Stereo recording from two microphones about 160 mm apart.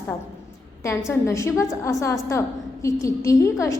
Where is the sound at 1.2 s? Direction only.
20° left (ahead or behind).